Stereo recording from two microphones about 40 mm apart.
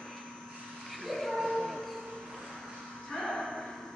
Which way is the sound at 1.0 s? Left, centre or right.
Centre.